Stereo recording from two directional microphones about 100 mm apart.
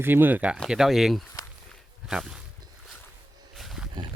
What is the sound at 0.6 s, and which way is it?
Speech, 5° right (ahead or behind).